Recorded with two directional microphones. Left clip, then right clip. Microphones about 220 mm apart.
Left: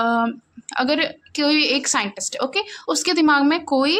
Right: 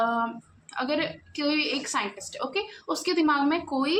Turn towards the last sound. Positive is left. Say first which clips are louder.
# left 8 dB
turn(degrees=50)  # may be behind; listen again after turning